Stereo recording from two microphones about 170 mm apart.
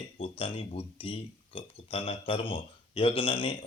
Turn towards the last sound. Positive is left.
turn(degrees=30)  # may be behind; listen again after turning